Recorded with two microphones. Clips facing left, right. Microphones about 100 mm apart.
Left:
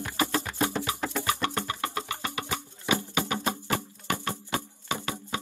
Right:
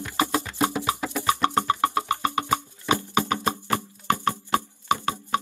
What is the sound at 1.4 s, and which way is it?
Music, 20° right (ahead or behind).